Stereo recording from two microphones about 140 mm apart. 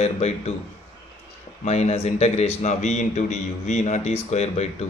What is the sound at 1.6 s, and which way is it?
A man's voice, 55° left (ahead or behind).